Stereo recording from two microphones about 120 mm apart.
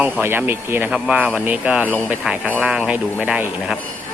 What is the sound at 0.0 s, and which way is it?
Speech, 20° right (ahead or behind).